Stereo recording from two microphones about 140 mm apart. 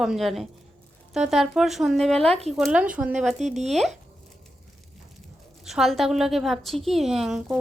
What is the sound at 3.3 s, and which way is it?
Speech, 55° right (ahead or behind).